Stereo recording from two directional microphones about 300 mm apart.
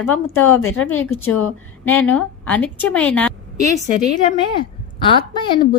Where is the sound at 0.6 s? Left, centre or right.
Left.